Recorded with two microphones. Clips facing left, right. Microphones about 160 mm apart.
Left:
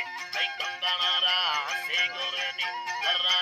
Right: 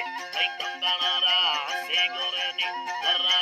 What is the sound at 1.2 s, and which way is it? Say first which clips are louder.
Music: right 2 dB; 15° right (ahead or behind).